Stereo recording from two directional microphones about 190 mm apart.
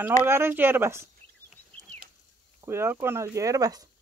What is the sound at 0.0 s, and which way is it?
Speech, 10° right (ahead or behind).